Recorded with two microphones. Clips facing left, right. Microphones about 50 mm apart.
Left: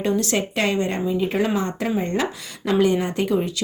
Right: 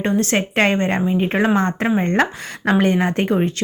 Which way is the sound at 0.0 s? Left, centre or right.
Right.